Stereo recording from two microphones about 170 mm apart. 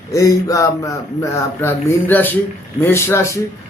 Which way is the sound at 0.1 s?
20° left (ahead or behind).